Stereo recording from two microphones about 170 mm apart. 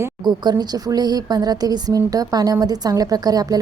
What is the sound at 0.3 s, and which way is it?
A woman's voice, 25° right (ahead or behind).